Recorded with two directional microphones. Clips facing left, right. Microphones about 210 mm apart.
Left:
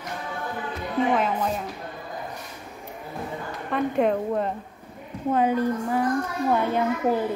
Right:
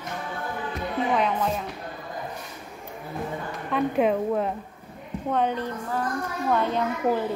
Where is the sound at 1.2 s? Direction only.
5° left (ahead or behind).